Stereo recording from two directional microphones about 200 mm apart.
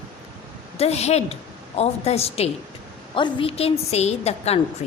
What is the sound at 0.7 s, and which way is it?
A woman's voice, 30° left (ahead or behind).